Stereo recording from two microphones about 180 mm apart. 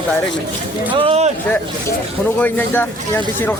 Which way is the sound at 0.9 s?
35° right (ahead or behind).